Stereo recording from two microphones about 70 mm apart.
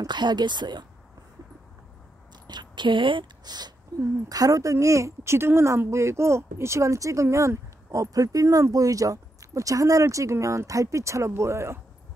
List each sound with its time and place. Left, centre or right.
0.0 s speech: right
2.4 s a sound: right
3.4 s speech: right
4.3 s speech: right